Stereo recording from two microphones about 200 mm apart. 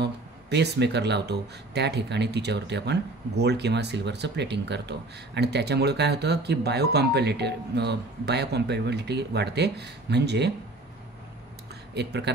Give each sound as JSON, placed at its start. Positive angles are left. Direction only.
{"t": 0.0, "sound": "speech", "side_deg": -60}
{"t": 11.9, "sound": "speech", "side_deg": -55}